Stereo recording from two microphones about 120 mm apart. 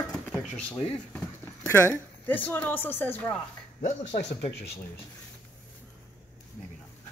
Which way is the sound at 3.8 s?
75° left (ahead or behind).